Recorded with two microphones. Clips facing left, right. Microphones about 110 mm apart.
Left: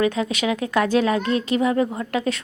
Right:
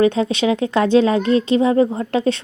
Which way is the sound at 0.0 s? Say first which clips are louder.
Right 5 dB; 30° right (ahead or behind).